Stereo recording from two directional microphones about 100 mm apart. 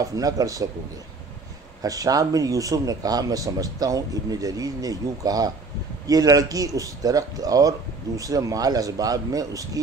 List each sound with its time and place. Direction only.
0.0 s speech: 35° right (ahead or behind)
1.8 s speech: 35° right (ahead or behind)